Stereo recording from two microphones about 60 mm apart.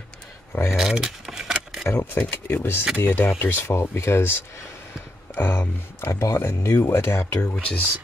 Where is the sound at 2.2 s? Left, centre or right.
Left.